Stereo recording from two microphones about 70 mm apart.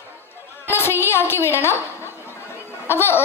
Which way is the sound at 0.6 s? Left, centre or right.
Left.